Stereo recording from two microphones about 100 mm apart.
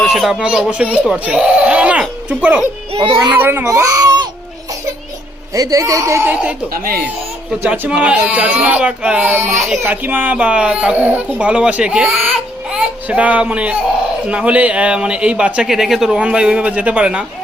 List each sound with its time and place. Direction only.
0.0 s speech: centre (ahead or behind)
2.9 s a child's voice: 70° right (ahead or behind)
3.3 s speech: 20° right (ahead or behind)
3.7 s a child's voice: 35° right (ahead or behind)
5.5 s speech: 35° right (ahead or behind); by 6.6 s 15° right (ahead or behind)
7.6 s speech: 20° right (ahead or behind)
7.9 s a man's voice: 10° right (ahead or behind)